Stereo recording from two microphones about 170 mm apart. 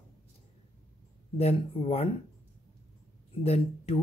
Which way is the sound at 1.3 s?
35° left (ahead or behind).